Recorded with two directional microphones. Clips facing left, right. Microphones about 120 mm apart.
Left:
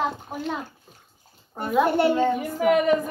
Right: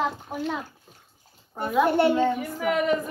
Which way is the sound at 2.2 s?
15° left (ahead or behind).